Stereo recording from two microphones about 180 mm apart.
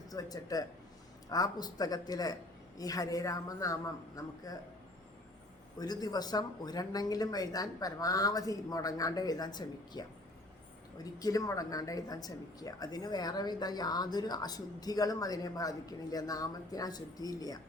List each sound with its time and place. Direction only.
0.1 s a woman's voice: 20° left (ahead or behind)
5.8 s a woman's voice: 20° left (ahead or behind)